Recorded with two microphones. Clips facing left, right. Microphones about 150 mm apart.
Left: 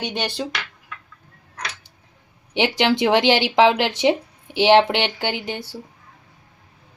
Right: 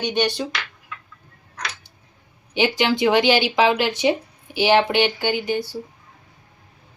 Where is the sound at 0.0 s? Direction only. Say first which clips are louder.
Right 4 dB; 90° left.